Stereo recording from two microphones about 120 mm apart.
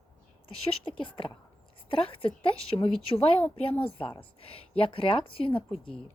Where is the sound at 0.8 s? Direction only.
45° left (ahead or behind).